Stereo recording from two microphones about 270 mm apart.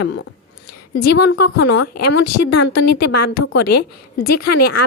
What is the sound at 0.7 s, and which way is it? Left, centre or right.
A woman's voice, left.